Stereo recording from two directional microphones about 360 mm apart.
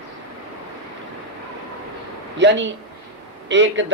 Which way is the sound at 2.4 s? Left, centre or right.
Right.